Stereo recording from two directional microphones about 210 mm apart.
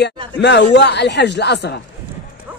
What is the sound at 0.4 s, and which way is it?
A man's voice, 55° left (ahead or behind).